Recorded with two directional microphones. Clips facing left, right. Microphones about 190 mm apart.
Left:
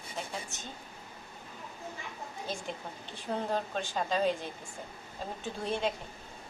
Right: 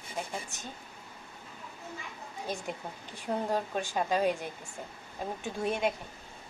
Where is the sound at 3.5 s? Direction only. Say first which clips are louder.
Right 2 dB; 10° right (ahead or behind).